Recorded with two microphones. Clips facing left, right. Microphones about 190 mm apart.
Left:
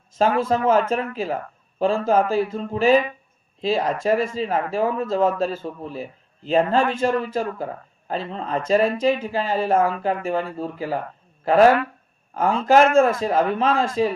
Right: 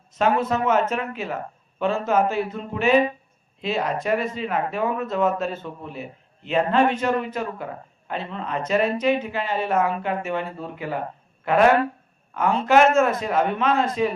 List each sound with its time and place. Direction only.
0.2 s a man's voice: 30° left (ahead or behind)